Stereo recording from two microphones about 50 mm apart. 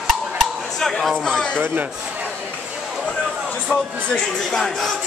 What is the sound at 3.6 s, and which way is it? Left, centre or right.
Speech, centre.